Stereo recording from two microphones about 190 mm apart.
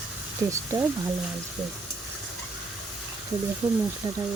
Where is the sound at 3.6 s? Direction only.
10° right (ahead or behind).